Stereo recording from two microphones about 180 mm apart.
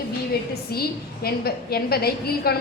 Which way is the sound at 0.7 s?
60° left (ahead or behind).